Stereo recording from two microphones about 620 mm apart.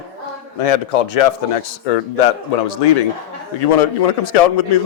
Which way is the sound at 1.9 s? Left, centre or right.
Left.